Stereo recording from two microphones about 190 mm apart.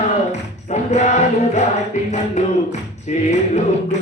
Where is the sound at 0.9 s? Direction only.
35° left (ahead or behind).